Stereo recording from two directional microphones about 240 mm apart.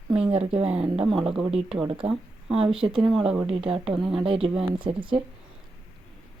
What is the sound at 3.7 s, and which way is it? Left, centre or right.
Speech, right.